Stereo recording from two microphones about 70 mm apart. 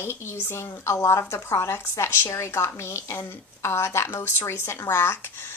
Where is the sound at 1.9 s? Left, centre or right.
Left.